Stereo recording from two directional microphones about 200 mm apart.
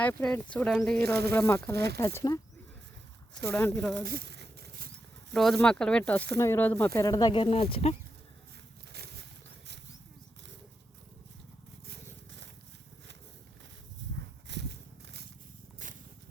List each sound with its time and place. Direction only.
0.0 s speech: 10° left (ahead or behind)
1.7 s speech: 55° right (ahead or behind)
2.0 s speech: 15° left (ahead or behind)
3.5 s speech: 10° left (ahead or behind)
3.9 s horse: 50° right (ahead or behind)
5.3 s speech: centre (ahead or behind); by 7.9 s 30° left (ahead or behind)
11.9 s a sound: 60° right (ahead or behind)
14.0 s a sound: 65° right (ahead or behind)
15.8 s a sound: 40° right (ahead or behind)